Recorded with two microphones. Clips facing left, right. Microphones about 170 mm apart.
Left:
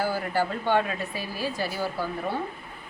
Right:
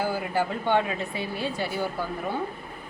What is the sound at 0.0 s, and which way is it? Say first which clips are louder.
A woman's voice: even; 15° right (ahead or behind).